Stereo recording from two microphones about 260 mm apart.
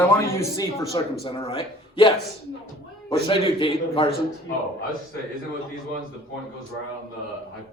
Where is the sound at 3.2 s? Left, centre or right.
Centre.